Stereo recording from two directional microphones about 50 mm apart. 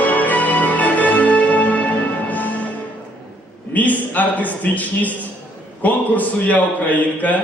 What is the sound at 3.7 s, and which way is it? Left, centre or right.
A man's voice, left.